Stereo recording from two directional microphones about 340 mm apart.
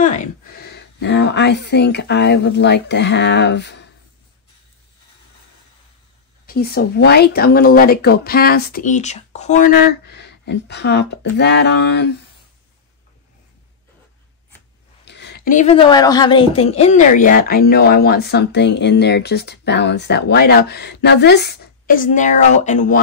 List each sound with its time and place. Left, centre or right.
0.0 s speech: left
6.4 s a woman's voice: left
15.0 s a woman's voice: left